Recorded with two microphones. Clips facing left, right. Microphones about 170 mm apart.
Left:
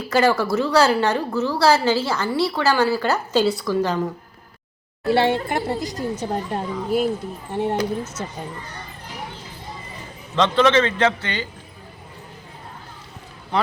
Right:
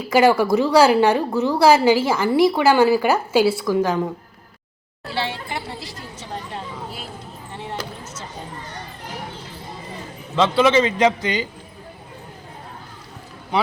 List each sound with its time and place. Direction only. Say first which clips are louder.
0.1 s a woman's voice: right 3 dB; 15° right (ahead or behind)
5.0 s a woman's voice: left 9 dB; 55° left (ahead or behind)
10.3 s a woman's voice: right 1 dB; 5° right (ahead or behind)